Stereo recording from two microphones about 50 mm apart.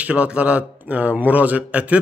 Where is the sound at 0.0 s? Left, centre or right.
Right.